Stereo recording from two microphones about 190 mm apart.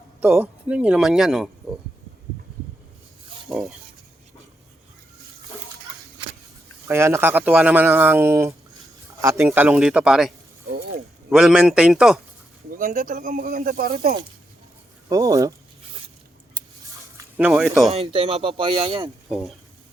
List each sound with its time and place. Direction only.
0.2 s speech: 5° right (ahead or behind)
3.5 s speech: centre (ahead or behind)
6.8 s speech: 15° right (ahead or behind)
9.5 s speech: 5° right (ahead or behind)
12.7 s speech: 45° right (ahead or behind)
15.1 s speech: 15° right (ahead or behind)
17.3 s speech: 5° right (ahead or behind)
17.9 s speech: 30° right (ahead or behind)